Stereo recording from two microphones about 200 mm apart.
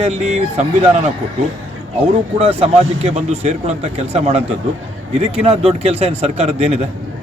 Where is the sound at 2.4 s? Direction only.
30° right (ahead or behind).